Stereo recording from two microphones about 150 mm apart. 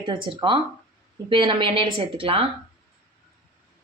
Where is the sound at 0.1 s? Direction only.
35° right (ahead or behind).